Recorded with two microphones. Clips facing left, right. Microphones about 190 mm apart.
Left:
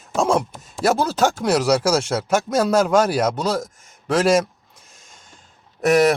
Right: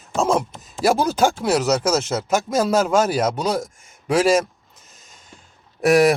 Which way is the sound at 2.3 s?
10° right (ahead or behind).